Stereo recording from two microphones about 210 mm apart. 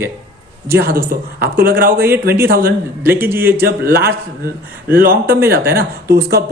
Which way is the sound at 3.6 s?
45° right (ahead or behind).